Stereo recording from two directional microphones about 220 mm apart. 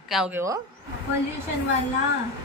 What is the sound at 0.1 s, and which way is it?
Speech, 5° right (ahead or behind).